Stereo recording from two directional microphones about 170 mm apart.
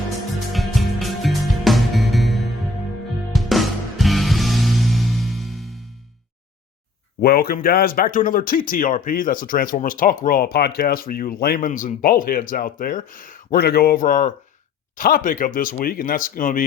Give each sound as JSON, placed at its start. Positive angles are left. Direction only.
{"t": 0.5, "sound": "music", "side_deg": 0}
{"t": 7.2, "sound": "speech", "side_deg": 65}